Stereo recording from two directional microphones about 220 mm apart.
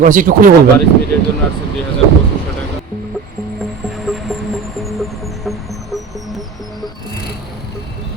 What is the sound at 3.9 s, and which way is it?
Music, centre (ahead or behind).